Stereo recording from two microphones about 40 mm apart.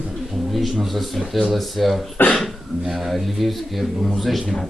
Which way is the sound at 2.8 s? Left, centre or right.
Centre.